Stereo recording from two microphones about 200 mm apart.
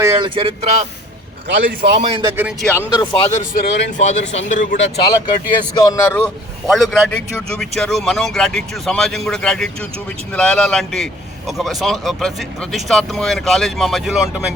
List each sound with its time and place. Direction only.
0.0 s speech: 25° right (ahead or behind)
2.0 s a man's voice: 25° right (ahead or behind)
2.3 s a man's voice: 10° right (ahead or behind)
2.9 s speech: 25° left (ahead or behind)
3.5 s speech: 35° left (ahead or behind)
4.8 s speech: 55° left (ahead or behind)
5.5 s a man's voice: 15° left (ahead or behind); by 14.4 s centre (ahead or behind)